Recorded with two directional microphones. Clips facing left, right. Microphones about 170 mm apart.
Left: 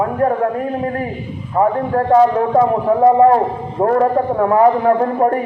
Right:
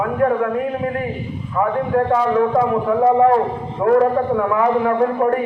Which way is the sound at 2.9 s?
35° left (ahead or behind).